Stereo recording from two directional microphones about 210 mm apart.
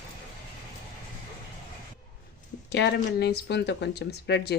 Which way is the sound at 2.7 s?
55° left (ahead or behind).